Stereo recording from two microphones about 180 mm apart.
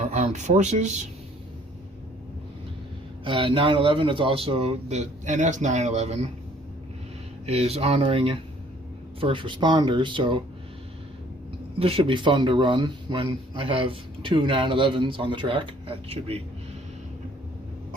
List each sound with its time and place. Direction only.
0.0 s speech: 40° right (ahead or behind)
3.2 s speech: 30° right (ahead or behind)
7.4 s a man's voice: 35° right (ahead or behind)
11.8 s a man's voice: 30° right (ahead or behind)